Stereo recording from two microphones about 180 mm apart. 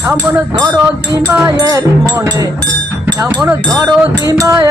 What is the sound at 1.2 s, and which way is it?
Speech, 15° right (ahead or behind).